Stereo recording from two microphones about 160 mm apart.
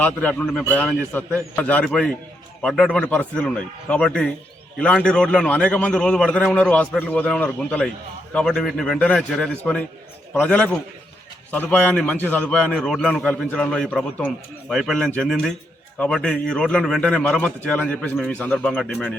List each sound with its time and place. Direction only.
0.0 s a man's voice: 10° left (ahead or behind)